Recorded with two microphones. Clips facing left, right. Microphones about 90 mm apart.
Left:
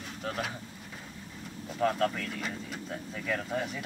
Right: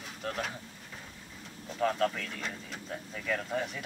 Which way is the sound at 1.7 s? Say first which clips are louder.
Left 1 dB; centre (ahead or behind).